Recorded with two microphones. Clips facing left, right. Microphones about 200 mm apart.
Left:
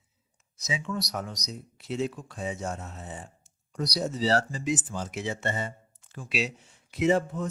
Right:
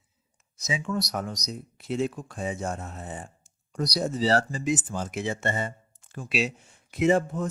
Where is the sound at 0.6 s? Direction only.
50° right (ahead or behind).